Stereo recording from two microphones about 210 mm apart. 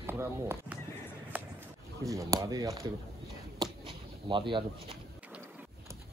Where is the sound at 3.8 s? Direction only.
25° right (ahead or behind).